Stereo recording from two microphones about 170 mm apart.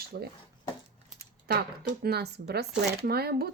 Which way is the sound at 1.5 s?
70° right (ahead or behind).